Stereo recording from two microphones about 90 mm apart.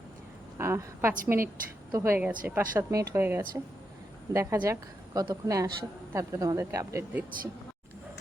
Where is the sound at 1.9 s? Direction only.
35° right (ahead or behind).